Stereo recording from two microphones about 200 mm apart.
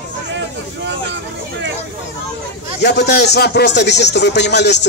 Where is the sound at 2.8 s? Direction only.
55° left (ahead or behind).